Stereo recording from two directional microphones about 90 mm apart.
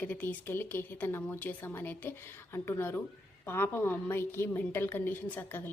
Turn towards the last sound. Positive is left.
turn(degrees=25)  # may be behind; listen again after turning